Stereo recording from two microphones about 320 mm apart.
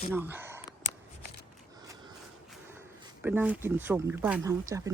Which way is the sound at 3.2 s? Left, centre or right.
Centre.